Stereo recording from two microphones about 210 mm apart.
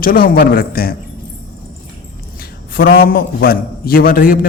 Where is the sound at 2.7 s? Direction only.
45° left (ahead or behind).